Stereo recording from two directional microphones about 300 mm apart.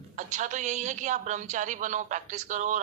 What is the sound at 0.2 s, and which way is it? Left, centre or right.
A man's voice, right.